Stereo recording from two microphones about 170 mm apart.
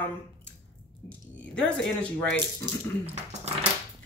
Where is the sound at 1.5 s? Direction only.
5° left (ahead or behind).